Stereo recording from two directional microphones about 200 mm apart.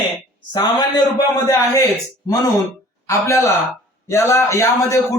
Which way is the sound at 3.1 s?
15° left (ahead or behind).